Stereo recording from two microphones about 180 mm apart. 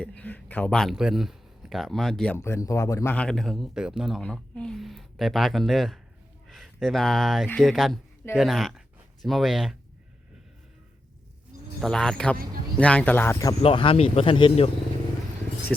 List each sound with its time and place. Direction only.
0.0 s speech: 10° left (ahead or behind)
11.8 s speech: 5° left (ahead or behind)
13.6 s speech: 30° left (ahead or behind)